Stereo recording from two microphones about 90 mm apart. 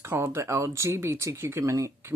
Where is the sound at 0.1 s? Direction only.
30° right (ahead or behind).